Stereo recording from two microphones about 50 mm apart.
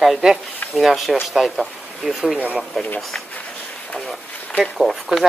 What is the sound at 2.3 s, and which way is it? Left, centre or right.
Speech, right.